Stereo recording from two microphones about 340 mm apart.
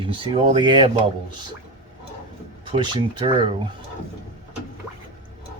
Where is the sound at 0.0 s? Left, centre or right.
Centre.